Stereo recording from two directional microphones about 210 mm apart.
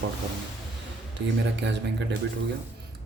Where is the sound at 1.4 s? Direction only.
60° right (ahead or behind).